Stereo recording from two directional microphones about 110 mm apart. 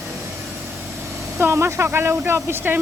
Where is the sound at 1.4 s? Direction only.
25° right (ahead or behind).